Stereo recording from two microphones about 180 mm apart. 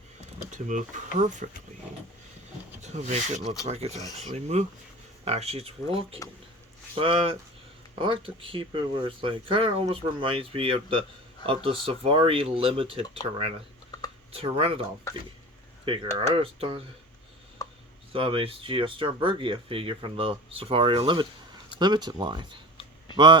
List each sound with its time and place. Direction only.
0.5 s speech: 45° right (ahead or behind)
2.8 s speech: 40° right (ahead or behind)
15.1 s speech: 15° left (ahead or behind)
16.1 s speech: 30° right (ahead or behind)
18.1 s speech: 30° right (ahead or behind)